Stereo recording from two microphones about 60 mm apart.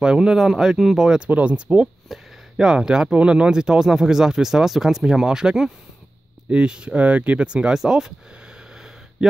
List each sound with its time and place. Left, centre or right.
0.0 s speech: centre
1.3 s speech: right
2.0 s speech: centre
8.7 s a sound: centre